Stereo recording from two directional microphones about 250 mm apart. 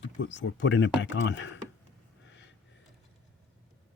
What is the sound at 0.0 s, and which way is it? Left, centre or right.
Speech, left.